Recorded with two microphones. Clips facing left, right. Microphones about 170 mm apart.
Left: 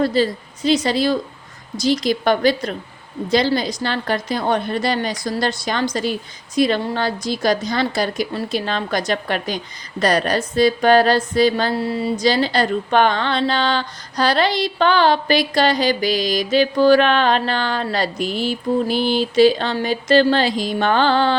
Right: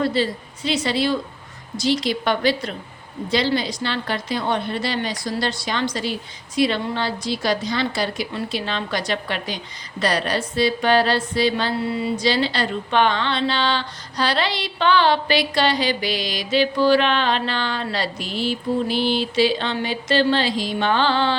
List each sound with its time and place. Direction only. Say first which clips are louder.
0.0 s a woman's voice: left 3 dB; 40° left (ahead or behind)